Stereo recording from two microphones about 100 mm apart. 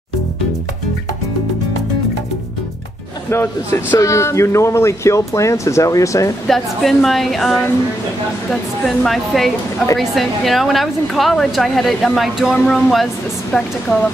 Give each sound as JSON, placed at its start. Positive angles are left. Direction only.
{"t": 3.3, "sound": "speech", "side_deg": 25}
{"t": 6.4, "sound": "a woman's voice", "side_deg": 0}